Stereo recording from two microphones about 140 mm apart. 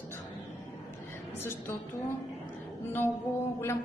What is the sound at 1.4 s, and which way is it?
Speech, 15° left (ahead or behind).